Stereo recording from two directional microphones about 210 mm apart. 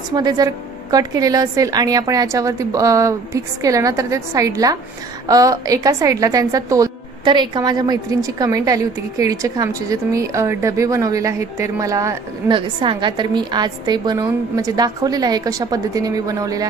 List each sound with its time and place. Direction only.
0.1 s a woman's voice: 20° right (ahead or behind)